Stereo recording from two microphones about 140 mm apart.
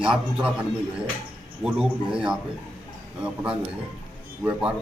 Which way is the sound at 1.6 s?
5° right (ahead or behind).